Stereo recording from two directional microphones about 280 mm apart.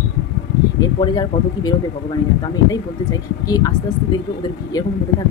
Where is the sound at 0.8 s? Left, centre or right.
Centre.